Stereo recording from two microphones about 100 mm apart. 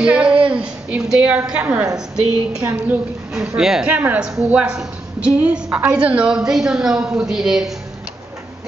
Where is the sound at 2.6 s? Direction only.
25° right (ahead or behind).